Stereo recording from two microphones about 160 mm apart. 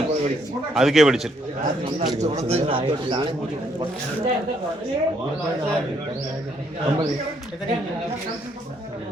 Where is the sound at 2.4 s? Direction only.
40° right (ahead or behind).